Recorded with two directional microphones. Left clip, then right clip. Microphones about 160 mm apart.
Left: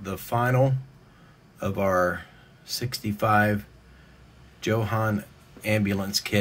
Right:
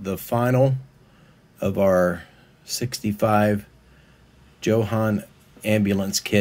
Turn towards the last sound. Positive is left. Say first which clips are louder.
# right 3 dB
turn(degrees=-20)  # may be behind; listen again after turning